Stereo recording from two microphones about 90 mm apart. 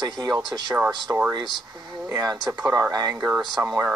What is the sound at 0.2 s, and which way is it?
Speech, 50° right (ahead or behind).